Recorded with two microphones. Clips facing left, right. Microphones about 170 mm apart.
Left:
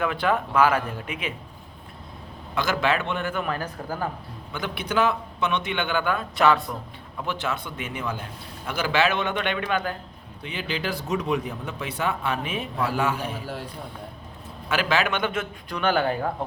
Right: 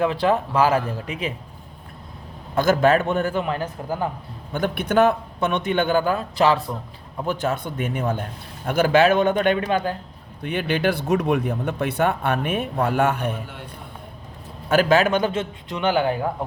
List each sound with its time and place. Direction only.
0.0 s speech: 30° right (ahead or behind)
2.6 s a man's voice: 45° right (ahead or behind)
3.3 s a man's voice: 20° right (ahead or behind)
4.5 s a man's voice: 50° right (ahead or behind); by 6.7 s 30° right (ahead or behind)
7.2 s a man's voice: 40° right (ahead or behind)
10.4 s speech: 60° right (ahead or behind)
14.7 s a man's voice: 45° right (ahead or behind); by 16.3 s 15° right (ahead or behind)